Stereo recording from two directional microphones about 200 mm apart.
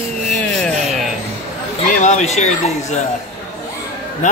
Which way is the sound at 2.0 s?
35° left (ahead or behind).